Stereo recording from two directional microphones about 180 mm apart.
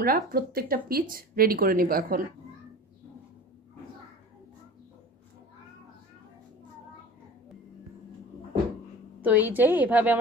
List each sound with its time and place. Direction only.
0.0 s speech: 55° right (ahead or behind)
9.2 s a woman's voice: 10° right (ahead or behind)